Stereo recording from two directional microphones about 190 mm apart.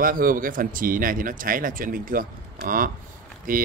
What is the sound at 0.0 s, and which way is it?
Speech, 45° right (ahead or behind).